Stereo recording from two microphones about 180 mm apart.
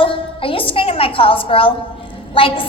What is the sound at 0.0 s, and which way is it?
A woman's voice, 30° left (ahead or behind).